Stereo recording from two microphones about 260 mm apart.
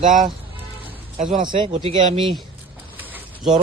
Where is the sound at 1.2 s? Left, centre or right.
Right.